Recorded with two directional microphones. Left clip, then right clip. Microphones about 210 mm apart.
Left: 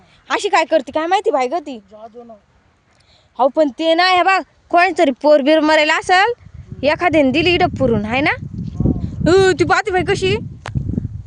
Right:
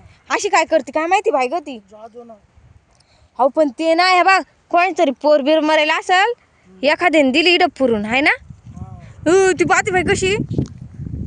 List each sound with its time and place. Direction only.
0.3 s speech: centre (ahead or behind)
1.7 s speech: 15° right (ahead or behind)
3.3 s speech: centre (ahead or behind)
4.7 s speech: 15° left (ahead or behind)